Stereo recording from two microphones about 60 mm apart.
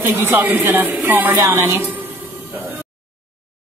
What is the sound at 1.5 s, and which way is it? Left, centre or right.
Speech, right.